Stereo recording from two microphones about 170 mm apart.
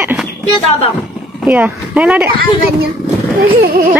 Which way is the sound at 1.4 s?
10° right (ahead or behind).